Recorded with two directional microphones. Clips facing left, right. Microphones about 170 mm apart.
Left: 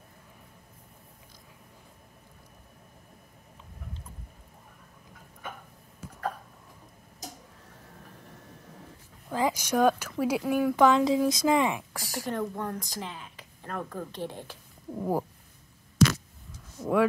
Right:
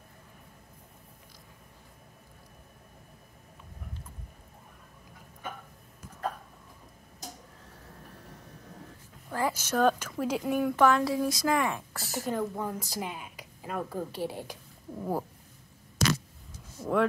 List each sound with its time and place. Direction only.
9.3 s speech: 15° left (ahead or behind)
10.8 s speech: 15° left (ahead or behind)
12.3 s speech: 5° right (ahead or behind)
15.0 s speech: 15° left (ahead or behind)
16.0 s a sound: 35° right (ahead or behind)